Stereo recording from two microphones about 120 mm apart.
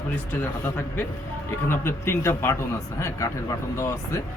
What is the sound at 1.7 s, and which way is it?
A man's voice, 20° left (ahead or behind).